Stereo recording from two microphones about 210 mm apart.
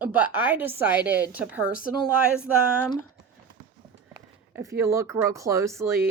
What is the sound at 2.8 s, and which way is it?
Speech, 20° left (ahead or behind).